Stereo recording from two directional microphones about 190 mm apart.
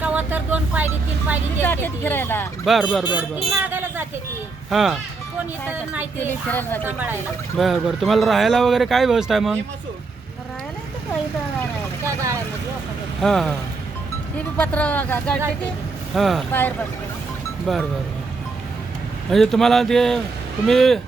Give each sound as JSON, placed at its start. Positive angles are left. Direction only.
{"t": 0.0, "sound": "vehicle", "side_deg": -10}
{"t": 1.6, "sound": "speech", "side_deg": 10}
{"t": 2.6, "sound": "speech", "side_deg": 0}
{"t": 6.5, "sound": "speech", "side_deg": 10}
{"t": 6.8, "sound": "speech", "side_deg": -10}
{"t": 7.6, "sound": "speech", "side_deg": 0}
{"t": 12.0, "sound": "speech", "side_deg": -15}
{"t": 13.2, "sound": "speech", "side_deg": 0}
{"t": 14.6, "sound": "speech", "side_deg": 5}
{"t": 16.5, "sound": "speech", "side_deg": 10}
{"t": 17.7, "sound": "speech", "side_deg": 0}
{"t": 19.3, "sound": "speech", "side_deg": 0}